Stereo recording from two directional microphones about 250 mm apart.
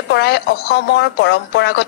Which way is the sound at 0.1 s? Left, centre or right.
Left.